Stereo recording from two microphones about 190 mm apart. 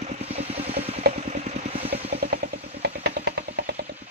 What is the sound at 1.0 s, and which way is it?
Vehicle, 55° right (ahead or behind).